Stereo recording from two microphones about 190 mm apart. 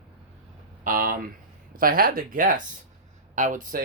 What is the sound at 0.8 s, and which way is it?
Speech, 50° right (ahead or behind).